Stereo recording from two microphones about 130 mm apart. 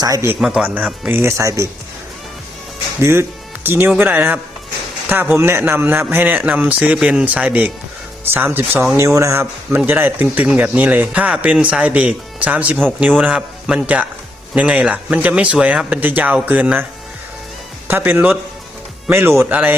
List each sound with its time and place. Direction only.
0.0 s speech: 25° right (ahead or behind)
0.3 s speech: 5° right (ahead or behind); by 1.6 s 25° right (ahead or behind)
3.0 s speech: 20° right (ahead or behind)
17.8 s speech: 15° right (ahead or behind)